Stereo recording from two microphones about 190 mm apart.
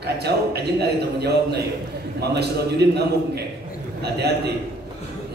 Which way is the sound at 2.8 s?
60° right (ahead or behind).